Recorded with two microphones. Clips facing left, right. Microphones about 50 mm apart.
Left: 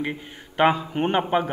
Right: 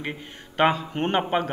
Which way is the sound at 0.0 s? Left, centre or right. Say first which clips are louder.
Left 3 dB; centre.